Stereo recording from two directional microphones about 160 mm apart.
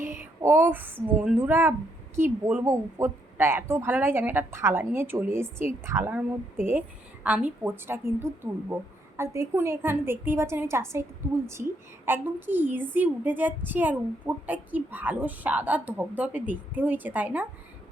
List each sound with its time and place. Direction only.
0.0 s a woman's voice: 15° right (ahead or behind)
12.0 s a woman's voice: 15° right (ahead or behind)